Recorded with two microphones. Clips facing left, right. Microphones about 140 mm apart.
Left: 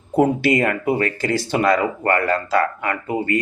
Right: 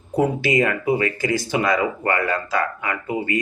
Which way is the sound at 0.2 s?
55° left (ahead or behind).